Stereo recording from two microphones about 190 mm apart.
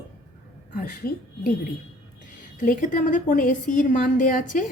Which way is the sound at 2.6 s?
45° left (ahead or behind).